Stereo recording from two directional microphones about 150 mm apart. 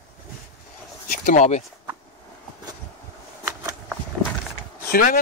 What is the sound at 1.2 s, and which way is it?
Speech, 55° left (ahead or behind).